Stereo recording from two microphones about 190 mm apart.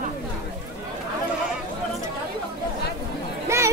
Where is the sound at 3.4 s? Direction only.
15° right (ahead or behind).